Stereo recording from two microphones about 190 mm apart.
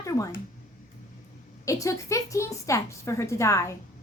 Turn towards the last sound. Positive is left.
turn(degrees=15)  # may be behind; listen again after turning